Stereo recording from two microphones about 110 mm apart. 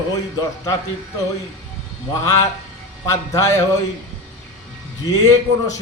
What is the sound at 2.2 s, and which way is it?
A man's voice, 30° left (ahead or behind).